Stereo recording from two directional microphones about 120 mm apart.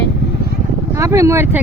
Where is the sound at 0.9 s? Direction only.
25° right (ahead or behind).